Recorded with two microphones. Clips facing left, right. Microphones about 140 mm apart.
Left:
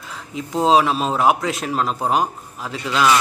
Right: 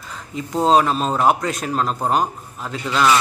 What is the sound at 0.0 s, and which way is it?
A man's voice, centre (ahead or behind).